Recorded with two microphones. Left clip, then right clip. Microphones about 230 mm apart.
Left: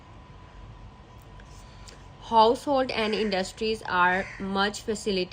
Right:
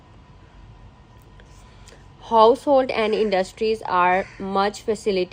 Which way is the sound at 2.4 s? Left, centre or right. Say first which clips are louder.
Right 6 dB; right.